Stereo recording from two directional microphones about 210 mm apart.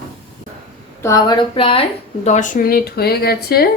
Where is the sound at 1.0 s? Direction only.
15° left (ahead or behind).